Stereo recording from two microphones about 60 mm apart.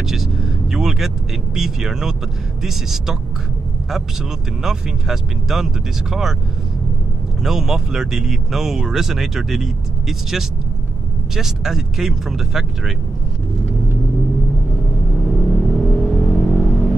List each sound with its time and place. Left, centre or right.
0.0 s speech: centre
4.6 s speech: centre
7.4 s speech: centre
15.2 s vehicle: centre